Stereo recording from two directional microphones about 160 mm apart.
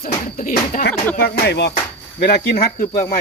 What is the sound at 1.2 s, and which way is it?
Speech, 90° left.